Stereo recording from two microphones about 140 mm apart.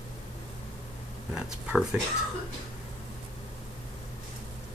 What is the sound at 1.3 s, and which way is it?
Speech, 5° right (ahead or behind).